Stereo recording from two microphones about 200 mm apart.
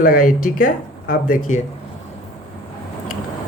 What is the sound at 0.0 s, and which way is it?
Speech, 45° left (ahead or behind).